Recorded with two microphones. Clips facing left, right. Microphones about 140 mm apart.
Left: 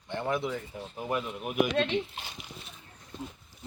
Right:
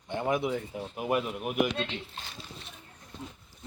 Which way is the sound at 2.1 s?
15° left (ahead or behind).